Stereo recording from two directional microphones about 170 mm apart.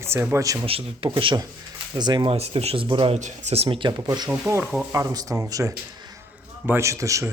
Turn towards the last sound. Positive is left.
turn(degrees=-20)  # may be behind; listen again after turning